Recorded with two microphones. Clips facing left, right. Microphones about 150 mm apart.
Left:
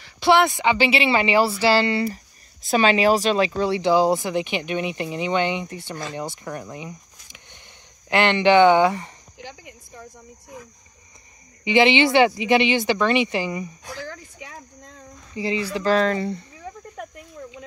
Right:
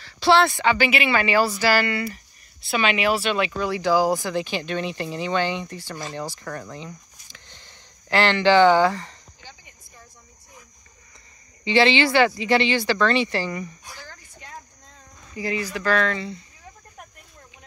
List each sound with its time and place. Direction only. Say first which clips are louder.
0.0 s speech: left 1 dB; 20° left (ahead or behind)
9.4 s cricket: left 11 dB; 90° left
11.6 s speech: left 2 dB; 20° left (ahead or behind)
13.9 s a sound: left 9 dB; 90° left
15.3 s speech: left 3 dB; 25° left (ahead or behind)
16.2 s speech: left 6 dB; 55° left (ahead or behind)
16.9 s cricket: left 10 dB; 85° left